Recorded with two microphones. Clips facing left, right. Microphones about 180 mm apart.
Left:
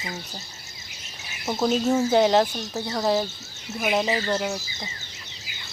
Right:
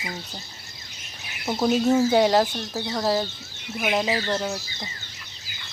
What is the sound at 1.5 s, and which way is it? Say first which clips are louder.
Speech: right 2 dB; centre (ahead or behind).